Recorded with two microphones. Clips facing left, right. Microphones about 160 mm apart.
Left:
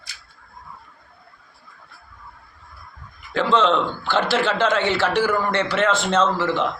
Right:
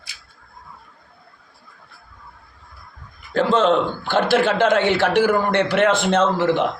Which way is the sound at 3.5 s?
50° right (ahead or behind).